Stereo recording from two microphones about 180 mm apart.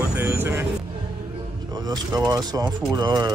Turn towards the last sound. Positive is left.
turn(degrees=-25)  # may be behind; listen again after turning